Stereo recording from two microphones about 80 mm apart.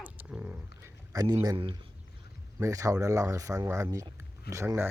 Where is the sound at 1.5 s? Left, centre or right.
Right.